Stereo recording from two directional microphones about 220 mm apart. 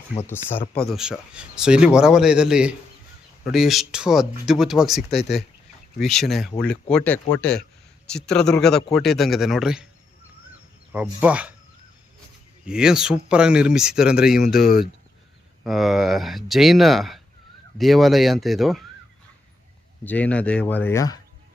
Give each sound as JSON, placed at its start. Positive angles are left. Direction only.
{"t": 0.3, "sound": "speech", "side_deg": 10}
{"t": 0.6, "sound": "speech", "side_deg": 25}
{"t": 0.9, "sound": "a man's voice", "side_deg": -5}
{"t": 10.9, "sound": "speech", "side_deg": -5}
{"t": 12.6, "sound": "a man's voice", "side_deg": -5}
{"t": 15.6, "sound": "a man's voice", "side_deg": 0}
{"t": 20.1, "sound": "speech", "side_deg": 5}